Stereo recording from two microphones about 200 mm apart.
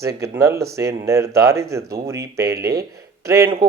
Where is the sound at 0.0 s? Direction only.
15° right (ahead or behind).